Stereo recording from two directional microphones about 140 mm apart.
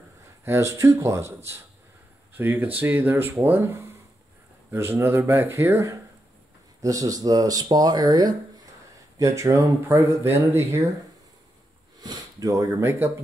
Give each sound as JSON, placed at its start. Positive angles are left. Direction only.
{"t": 0.5, "sound": "speech", "side_deg": -20}
{"t": 12.0, "sound": "speech", "side_deg": -25}